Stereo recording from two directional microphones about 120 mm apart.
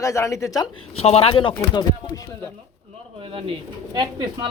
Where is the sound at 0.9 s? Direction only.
55° left (ahead or behind); by 2.2 s 40° left (ahead or behind).